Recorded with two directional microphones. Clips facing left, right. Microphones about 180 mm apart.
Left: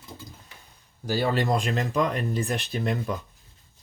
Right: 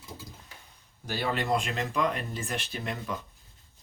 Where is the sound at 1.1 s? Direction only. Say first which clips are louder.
Left 4 dB; 40° left (ahead or behind).